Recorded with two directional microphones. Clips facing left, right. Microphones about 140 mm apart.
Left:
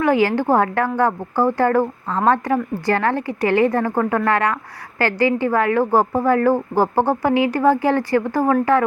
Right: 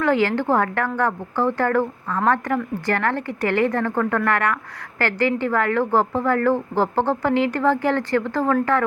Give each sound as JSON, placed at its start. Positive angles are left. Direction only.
{"t": 0.0, "sound": "a woman's voice", "side_deg": 15}